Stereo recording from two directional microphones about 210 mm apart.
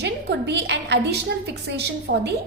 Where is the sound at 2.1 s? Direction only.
65° right (ahead or behind).